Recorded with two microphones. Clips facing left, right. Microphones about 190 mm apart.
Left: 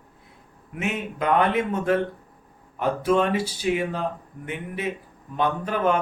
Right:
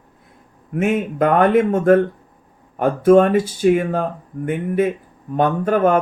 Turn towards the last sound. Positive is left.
turn(degrees=-50)  # may be behind; listen again after turning